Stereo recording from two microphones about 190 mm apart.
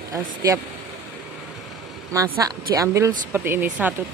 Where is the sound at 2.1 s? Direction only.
15° right (ahead or behind).